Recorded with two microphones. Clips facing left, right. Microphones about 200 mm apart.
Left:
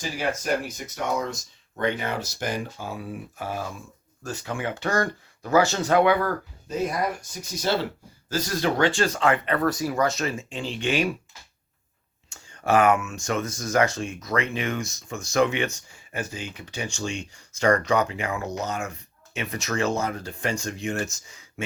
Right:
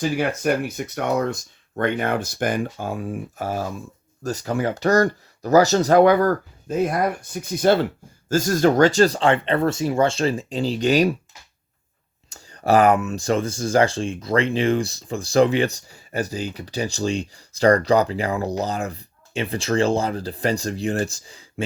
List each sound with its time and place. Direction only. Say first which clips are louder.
0.2 s speech: right 5 dB; 60° right (ahead or behind); by 11.1 s 40° right (ahead or behind)
12.3 s speech: right 4 dB; 35° right (ahead or behind)